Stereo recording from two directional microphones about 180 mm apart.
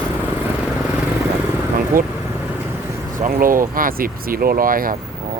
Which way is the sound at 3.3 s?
50° right (ahead or behind).